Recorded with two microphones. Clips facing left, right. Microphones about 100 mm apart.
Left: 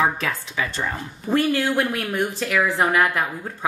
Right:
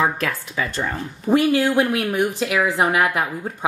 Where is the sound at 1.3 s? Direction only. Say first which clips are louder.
Right 4 dB; 15° right (ahead or behind).